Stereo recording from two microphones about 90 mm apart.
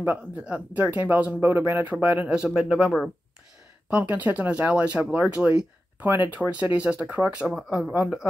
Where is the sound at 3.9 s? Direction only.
20° right (ahead or behind).